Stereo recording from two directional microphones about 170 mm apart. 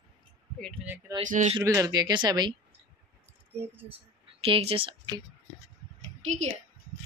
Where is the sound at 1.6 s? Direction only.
20° right (ahead or behind).